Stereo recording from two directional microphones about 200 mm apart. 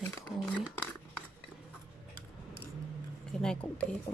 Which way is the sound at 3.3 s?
5° left (ahead or behind).